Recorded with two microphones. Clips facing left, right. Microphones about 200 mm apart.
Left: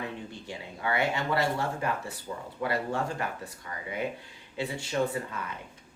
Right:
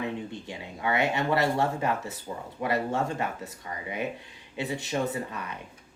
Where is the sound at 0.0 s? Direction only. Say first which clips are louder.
Right 5 dB; 20° right (ahead or behind).